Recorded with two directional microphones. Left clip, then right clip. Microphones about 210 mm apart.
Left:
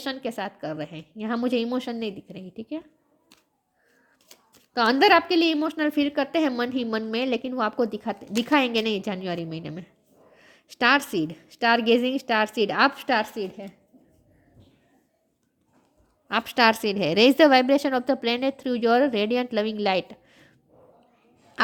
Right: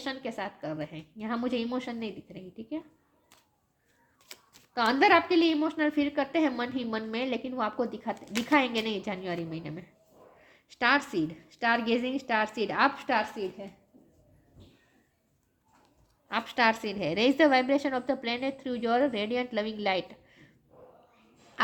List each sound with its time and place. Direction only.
0.0 s a woman's voice: 45° left (ahead or behind)
4.7 s a woman's voice: 45° left (ahead or behind)
16.3 s a woman's voice: 45° left (ahead or behind)